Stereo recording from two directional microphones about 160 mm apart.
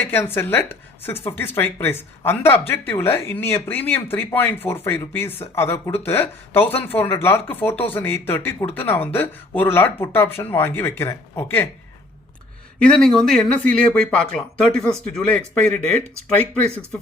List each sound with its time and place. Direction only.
0.0 s speech: 15° left (ahead or behind)
12.8 s speech: 5° left (ahead or behind)